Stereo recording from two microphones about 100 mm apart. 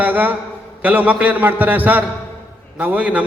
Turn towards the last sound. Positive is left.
turn(degrees=-15)  # may be behind; listen again after turning